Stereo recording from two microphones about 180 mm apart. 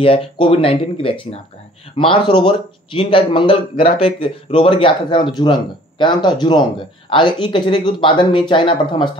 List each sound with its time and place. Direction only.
0.0 s a man's voice: 30° left (ahead or behind)